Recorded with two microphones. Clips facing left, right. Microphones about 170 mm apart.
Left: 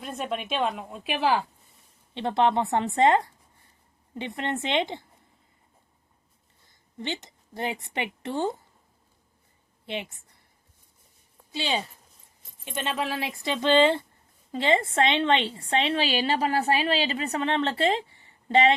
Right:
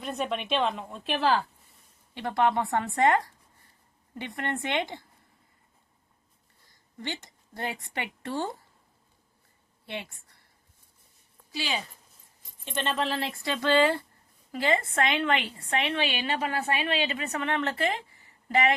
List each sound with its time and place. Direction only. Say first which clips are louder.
0.0 s a woman's voice: right 1 dB; centre (ahead or behind)
2.1 s a woman's voice: left 2 dB; 25° left (ahead or behind)
7.0 s a woman's voice: left 3 dB; 20° left (ahead or behind)
9.8 s a woman's voice: left 4 dB; 20° left (ahead or behind)
11.5 s a woman's voice: left 4 dB; 25° left (ahead or behind)
12.6 s a woman's voice: even; 10° left (ahead or behind); by 18.7 s 25° left (ahead or behind)